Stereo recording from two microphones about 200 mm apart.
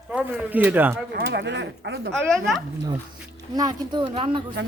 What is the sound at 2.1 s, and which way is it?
Speech, centre (ahead or behind).